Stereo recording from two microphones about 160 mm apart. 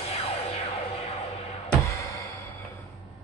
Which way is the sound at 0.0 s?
40° left (ahead or behind).